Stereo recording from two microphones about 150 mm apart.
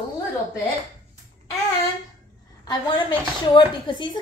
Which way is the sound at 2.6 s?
30° left (ahead or behind).